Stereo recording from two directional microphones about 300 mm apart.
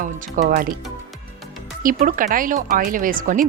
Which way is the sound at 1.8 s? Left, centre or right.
Right.